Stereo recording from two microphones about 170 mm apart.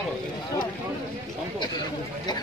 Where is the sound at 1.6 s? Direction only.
25° left (ahead or behind).